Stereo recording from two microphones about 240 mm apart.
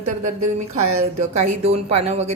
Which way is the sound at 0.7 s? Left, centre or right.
Right.